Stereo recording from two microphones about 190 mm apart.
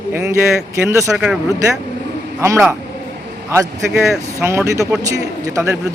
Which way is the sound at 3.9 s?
Centre (ahead or behind).